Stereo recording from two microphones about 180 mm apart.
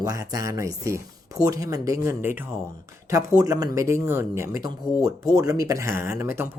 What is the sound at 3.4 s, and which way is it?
Speech, 20° right (ahead or behind).